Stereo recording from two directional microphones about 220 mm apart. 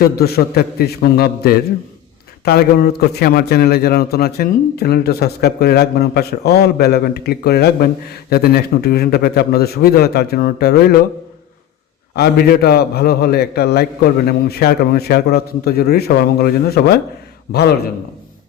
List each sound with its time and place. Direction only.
0.0 s a man's voice: 45° left (ahead or behind)
12.1 s a man's voice: 45° left (ahead or behind)